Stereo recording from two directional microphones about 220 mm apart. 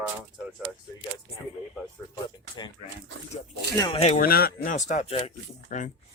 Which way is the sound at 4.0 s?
35° left (ahead or behind).